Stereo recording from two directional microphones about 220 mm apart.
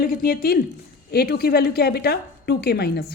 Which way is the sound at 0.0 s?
40° left (ahead or behind).